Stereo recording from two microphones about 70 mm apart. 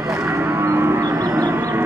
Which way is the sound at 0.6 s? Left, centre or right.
Right.